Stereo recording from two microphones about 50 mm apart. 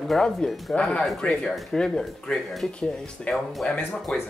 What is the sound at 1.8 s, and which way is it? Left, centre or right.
Speech, centre.